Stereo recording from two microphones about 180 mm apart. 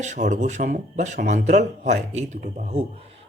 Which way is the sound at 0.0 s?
40° right (ahead or behind).